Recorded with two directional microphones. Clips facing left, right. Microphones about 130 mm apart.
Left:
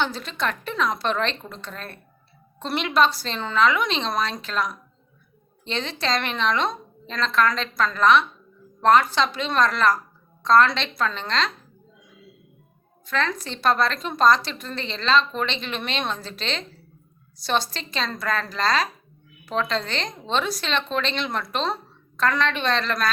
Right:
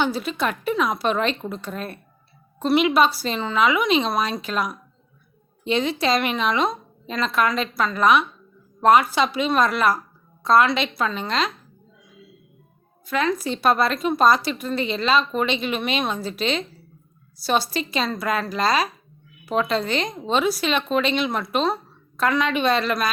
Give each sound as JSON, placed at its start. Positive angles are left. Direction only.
{"t": 0.0, "sound": "a woman's voice", "side_deg": -10}
{"t": 13.1, "sound": "a woman's voice", "side_deg": -10}